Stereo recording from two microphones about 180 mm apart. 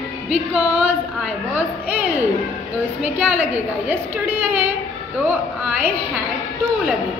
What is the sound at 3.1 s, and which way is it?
Speech, 5° right (ahead or behind).